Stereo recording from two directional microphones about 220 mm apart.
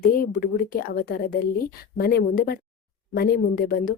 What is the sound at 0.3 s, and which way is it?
A woman's voice, 40° left (ahead or behind).